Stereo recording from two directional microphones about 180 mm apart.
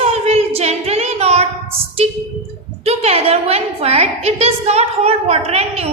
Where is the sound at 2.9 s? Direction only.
35° right (ahead or behind).